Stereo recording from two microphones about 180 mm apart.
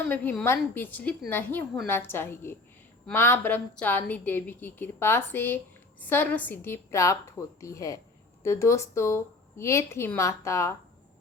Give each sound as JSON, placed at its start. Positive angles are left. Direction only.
{"t": 0.1, "sound": "a woman's voice", "side_deg": 10}